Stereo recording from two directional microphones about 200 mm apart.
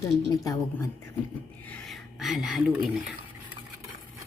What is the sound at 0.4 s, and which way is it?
Speech, 15° left (ahead or behind).